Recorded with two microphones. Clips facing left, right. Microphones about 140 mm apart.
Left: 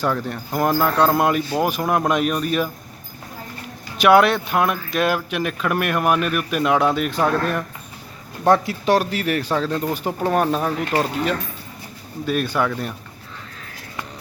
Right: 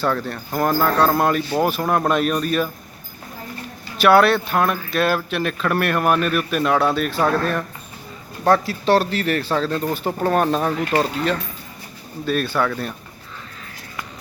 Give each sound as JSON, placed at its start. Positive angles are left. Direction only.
{"t": 0.0, "sound": "speech", "side_deg": 15}
{"t": 3.9, "sound": "speech", "side_deg": 15}